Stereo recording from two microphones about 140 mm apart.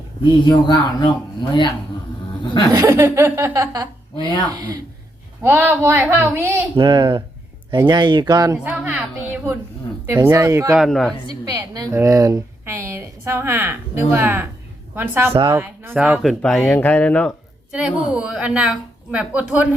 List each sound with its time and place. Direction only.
0.3 s speech: 35° left (ahead or behind)
2.7 s speech: 20° right (ahead or behind)
4.2 s speech: 35° left (ahead or behind)
5.4 s a woman's voice: 15° right (ahead or behind)
6.7 s speech: 35° right (ahead or behind)
8.5 s a woman's voice: 10° right (ahead or behind)
10.8 s speech: centre (ahead or behind)
11.3 s a woman's voice: 25° right (ahead or behind); by 16.3 s 5° right (ahead or behind)
16.4 s speech: 5° left (ahead or behind)
17.7 s a woman's voice: 5° right (ahead or behind)